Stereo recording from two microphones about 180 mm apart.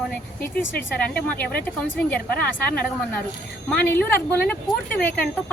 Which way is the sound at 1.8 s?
5° left (ahead or behind).